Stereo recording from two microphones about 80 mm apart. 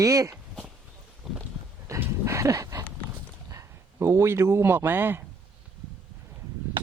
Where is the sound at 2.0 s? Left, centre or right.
Right.